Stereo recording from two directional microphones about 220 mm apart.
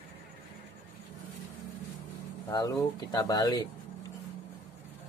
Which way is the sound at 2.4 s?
15° left (ahead or behind).